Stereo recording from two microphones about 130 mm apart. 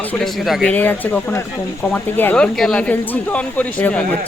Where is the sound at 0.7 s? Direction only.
15° left (ahead or behind).